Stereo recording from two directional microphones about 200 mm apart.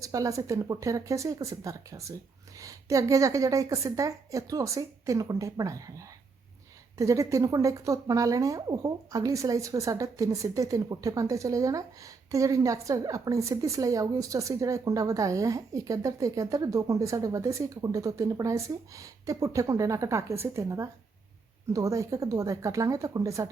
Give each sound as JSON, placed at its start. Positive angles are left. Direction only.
{"t": 0.0, "sound": "a woman's voice", "side_deg": -15}